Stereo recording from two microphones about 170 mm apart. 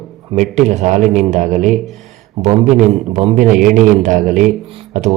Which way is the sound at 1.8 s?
Centre (ahead or behind).